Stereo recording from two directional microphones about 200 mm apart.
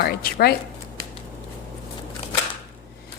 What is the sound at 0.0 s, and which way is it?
Speech, 50° left (ahead or behind).